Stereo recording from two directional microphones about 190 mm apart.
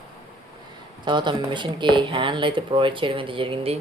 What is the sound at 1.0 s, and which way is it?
Speech, 25° right (ahead or behind).